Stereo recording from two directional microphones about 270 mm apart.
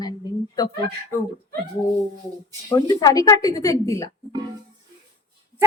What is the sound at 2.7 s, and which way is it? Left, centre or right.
Speech, centre.